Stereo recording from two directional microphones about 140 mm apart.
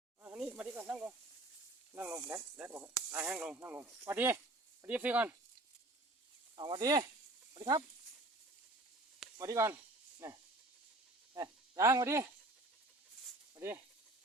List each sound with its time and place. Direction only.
0.3 s snake: 10° right (ahead or behind)
1.9 s speech: 15° right (ahead or behind)
3.6 s speech: 20° right (ahead or behind)
6.6 s speech: 30° right (ahead or behind)
9.4 s snake: 20° right (ahead or behind)
11.8 s speech: 20° right (ahead or behind)